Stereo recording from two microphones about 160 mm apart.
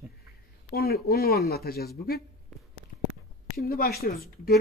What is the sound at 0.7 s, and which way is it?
Speech, 75° left (ahead or behind).